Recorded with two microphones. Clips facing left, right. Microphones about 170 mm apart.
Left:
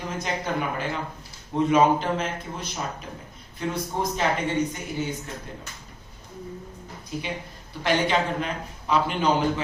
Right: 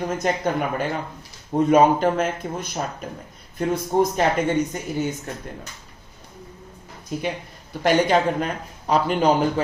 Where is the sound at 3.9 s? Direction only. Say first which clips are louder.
Right 11 dB; 50° right (ahead or behind).